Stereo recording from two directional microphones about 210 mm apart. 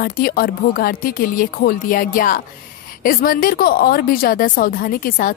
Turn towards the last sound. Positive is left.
turn(degrees=40)  # may be behind; listen again after turning